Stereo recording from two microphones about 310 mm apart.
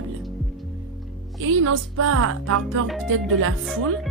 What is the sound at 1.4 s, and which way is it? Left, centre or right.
Speech, right.